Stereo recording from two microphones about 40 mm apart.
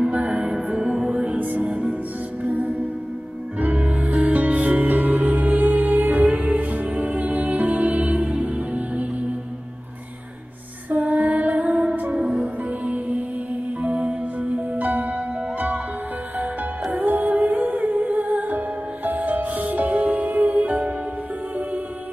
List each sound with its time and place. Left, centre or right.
0.1 s music: right
0.7 s music: centre
1.1 s music: right
1.4 s music: right
1.7 s music: right
2.4 s music: right
10.9 s female singing: right
12.6 s music: right
14.8 s music: right
16.9 s music: right